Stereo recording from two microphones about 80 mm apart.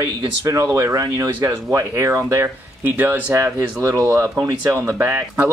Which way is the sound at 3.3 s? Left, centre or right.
Right.